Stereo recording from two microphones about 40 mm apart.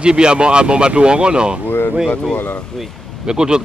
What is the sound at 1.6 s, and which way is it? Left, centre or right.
Speech, left.